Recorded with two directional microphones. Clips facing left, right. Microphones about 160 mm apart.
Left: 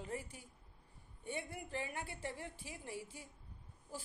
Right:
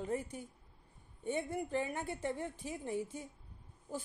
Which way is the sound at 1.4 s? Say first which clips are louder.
Right 8 dB; 45° right (ahead or behind).